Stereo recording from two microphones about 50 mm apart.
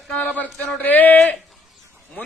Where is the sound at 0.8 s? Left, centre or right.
Left.